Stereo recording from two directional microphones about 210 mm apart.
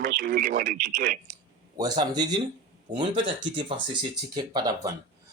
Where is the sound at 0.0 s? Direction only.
45° right (ahead or behind).